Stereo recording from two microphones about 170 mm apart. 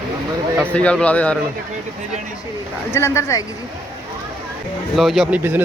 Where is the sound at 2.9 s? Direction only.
15° left (ahead or behind).